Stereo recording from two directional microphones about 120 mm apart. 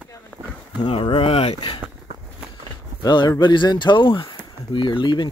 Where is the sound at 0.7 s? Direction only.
40° left (ahead or behind); by 1.7 s 55° left (ahead or behind).